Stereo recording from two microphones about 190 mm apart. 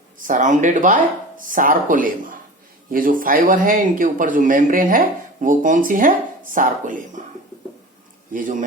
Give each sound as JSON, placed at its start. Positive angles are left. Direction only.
{"t": 0.2, "sound": "speech", "side_deg": -45}
{"t": 8.3, "sound": "speech", "side_deg": -45}